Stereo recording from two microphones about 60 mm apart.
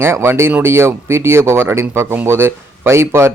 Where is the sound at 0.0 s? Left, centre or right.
Right.